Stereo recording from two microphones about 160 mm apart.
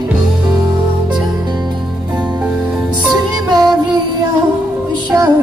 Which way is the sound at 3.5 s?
25° right (ahead or behind).